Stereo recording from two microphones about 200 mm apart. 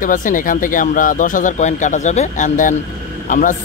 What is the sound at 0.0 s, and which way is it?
Speech, 40° left (ahead or behind).